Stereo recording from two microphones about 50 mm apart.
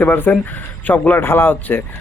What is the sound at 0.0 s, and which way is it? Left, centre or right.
Speech, left.